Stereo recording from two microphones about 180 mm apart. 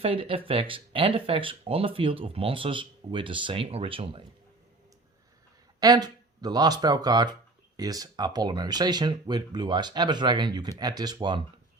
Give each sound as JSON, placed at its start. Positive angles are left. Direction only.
{"t": 0.0, "sound": "speech", "side_deg": -30}
{"t": 5.8, "sound": "speech", "side_deg": -20}